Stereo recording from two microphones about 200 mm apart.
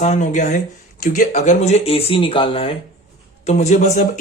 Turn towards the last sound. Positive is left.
turn(degrees=35)  # may be behind; listen again after turning